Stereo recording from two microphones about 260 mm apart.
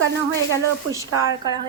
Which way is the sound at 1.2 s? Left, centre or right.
Centre.